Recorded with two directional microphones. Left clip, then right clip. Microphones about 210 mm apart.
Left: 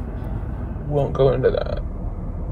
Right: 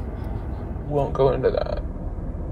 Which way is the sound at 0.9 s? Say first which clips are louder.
Left 2 dB; 30° right (ahead or behind).